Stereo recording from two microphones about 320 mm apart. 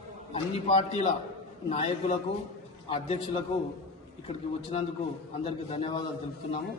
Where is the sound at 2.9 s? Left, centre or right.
Centre.